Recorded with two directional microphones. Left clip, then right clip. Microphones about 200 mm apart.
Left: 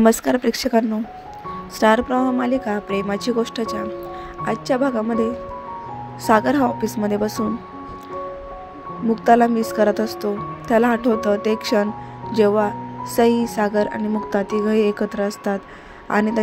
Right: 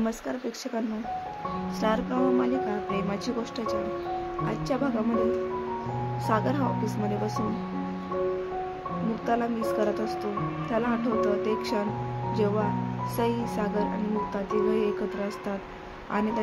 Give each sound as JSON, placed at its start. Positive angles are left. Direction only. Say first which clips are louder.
{"t": 0.0, "sound": "speech", "louder": "left 15 dB", "side_deg": 45}
{"t": 6.2, "sound": "speech", "louder": "left 11 dB", "side_deg": 35}
{"t": 9.2, "sound": "speech", "louder": "left 13 dB", "side_deg": 35}